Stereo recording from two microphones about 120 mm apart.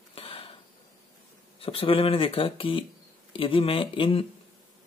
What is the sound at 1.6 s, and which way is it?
A man's voice, 50° left (ahead or behind).